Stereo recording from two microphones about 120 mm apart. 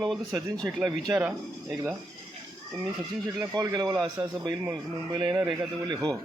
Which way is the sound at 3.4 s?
30° right (ahead or behind).